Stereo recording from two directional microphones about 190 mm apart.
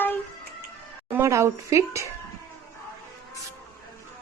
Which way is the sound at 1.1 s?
15° right (ahead or behind).